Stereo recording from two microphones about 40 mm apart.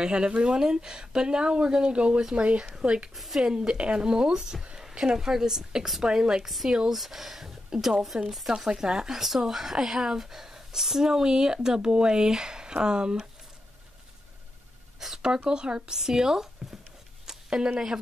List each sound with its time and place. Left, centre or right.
0.0 s speech: right
3.2 s speech: centre
3.4 s a woman's voice: centre
6.4 s speech: centre
15.0 s speech: centre
17.3 s a sound: centre